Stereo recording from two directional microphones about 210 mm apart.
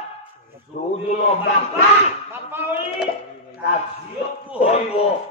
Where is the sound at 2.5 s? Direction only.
5° right (ahead or behind).